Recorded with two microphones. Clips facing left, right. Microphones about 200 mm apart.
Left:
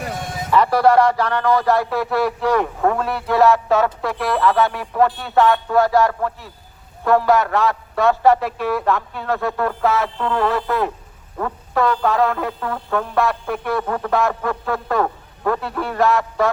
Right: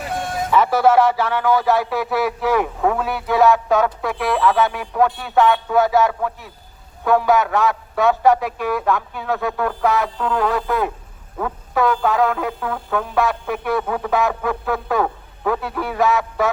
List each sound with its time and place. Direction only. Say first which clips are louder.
0.5 s speech: left 1 dB; centre (ahead or behind)